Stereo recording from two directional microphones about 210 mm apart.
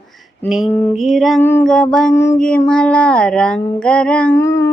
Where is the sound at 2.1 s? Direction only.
15° left (ahead or behind).